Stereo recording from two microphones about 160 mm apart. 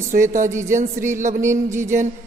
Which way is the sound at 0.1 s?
55° right (ahead or behind).